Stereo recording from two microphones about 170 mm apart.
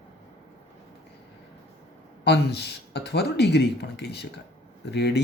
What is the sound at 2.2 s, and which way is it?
Speech, 80° left.